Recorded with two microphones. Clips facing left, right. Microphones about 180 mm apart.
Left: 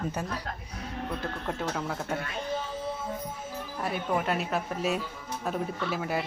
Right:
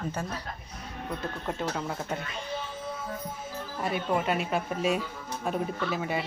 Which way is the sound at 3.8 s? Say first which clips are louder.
Right 1 dB; 5° left (ahead or behind).